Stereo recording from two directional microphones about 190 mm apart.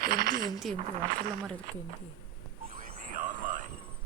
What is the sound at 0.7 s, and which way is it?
Speech, 30° right (ahead or behind).